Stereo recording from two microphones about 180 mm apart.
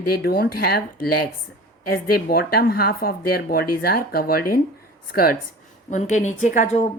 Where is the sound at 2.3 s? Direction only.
55° left (ahead or behind).